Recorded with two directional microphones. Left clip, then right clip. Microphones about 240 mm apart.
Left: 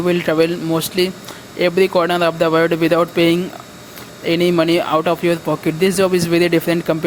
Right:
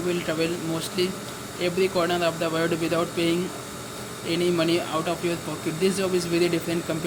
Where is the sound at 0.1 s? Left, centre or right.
Left.